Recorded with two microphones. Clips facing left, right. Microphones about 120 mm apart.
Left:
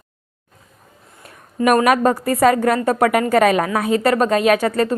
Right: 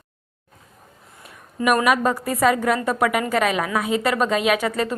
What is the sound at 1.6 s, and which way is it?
Speech, 40° left (ahead or behind).